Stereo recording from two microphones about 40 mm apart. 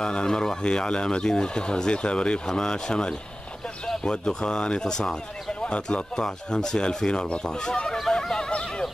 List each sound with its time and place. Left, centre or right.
0.0 s speech: left
8.1 s neigh: centre
8.5 s a sound: left